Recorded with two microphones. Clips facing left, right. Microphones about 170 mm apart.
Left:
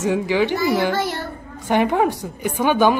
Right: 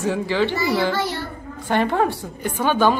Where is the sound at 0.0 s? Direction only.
15° left (ahead or behind).